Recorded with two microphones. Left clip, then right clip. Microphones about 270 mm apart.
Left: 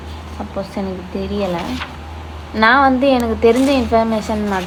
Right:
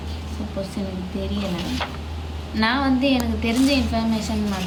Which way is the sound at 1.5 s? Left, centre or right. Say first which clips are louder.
Left 4 dB; centre.